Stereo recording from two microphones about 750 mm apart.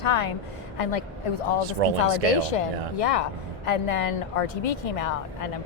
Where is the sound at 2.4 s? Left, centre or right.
Left.